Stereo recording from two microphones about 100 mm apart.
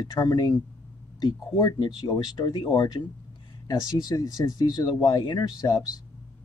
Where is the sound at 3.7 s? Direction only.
40° left (ahead or behind).